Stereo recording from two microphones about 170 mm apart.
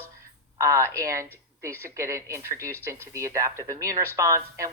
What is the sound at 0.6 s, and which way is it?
A woman's voice, 15° right (ahead or behind).